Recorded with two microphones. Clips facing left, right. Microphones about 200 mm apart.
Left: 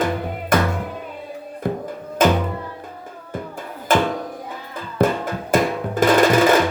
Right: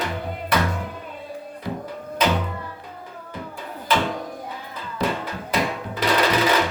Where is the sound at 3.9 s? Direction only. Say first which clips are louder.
Left 4 dB; 50° left (ahead or behind).